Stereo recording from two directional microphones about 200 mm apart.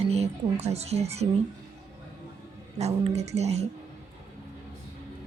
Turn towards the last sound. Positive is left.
turn(degrees=-35)  # may be behind; listen again after turning